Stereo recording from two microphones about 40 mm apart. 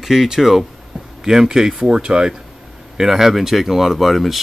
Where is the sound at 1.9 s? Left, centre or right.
Right.